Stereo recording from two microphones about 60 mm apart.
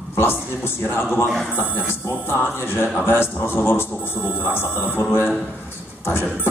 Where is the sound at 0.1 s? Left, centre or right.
Left.